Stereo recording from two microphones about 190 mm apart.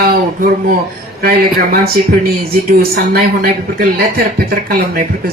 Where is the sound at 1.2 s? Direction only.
55° right (ahead or behind).